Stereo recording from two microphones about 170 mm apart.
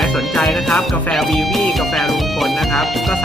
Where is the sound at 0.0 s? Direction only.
Centre (ahead or behind).